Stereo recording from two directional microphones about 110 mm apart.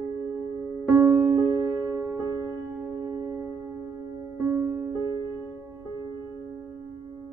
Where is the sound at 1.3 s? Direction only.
35° right (ahead or behind).